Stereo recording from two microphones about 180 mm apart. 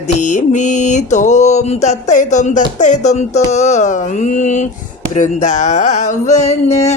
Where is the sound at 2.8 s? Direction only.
40° left (ahead or behind).